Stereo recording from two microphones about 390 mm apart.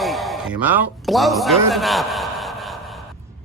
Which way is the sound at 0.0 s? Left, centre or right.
Centre.